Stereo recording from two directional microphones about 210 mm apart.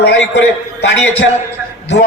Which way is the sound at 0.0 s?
55° left (ahead or behind).